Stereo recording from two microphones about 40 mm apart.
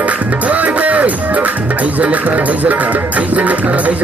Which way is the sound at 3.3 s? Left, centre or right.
Right.